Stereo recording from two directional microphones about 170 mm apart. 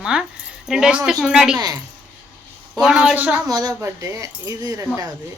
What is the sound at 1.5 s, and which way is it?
Speech, 20° right (ahead or behind).